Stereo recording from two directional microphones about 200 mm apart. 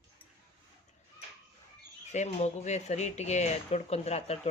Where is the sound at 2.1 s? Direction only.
35° left (ahead or behind).